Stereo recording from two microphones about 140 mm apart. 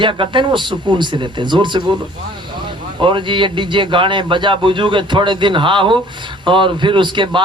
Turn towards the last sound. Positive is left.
turn(degrees=-35)  # may be behind; listen again after turning